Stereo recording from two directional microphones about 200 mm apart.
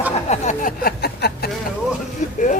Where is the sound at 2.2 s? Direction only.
35° left (ahead or behind).